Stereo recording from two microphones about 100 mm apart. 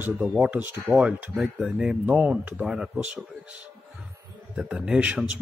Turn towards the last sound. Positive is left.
turn(degrees=-10)  # may be behind; listen again after turning